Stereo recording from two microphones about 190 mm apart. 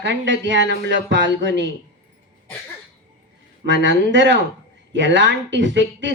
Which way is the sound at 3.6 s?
75° right (ahead or behind).